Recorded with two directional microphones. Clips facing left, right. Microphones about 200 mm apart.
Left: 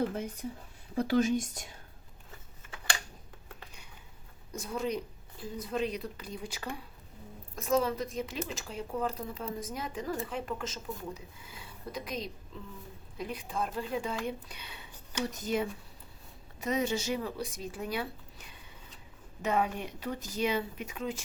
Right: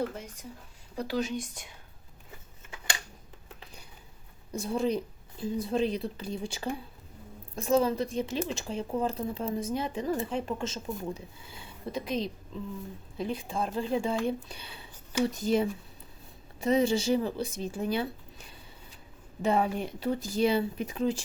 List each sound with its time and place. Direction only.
0.9 s speech: 50° left (ahead or behind)
4.5 s speech: 30° right (ahead or behind)
19.4 s speech: 30° right (ahead or behind)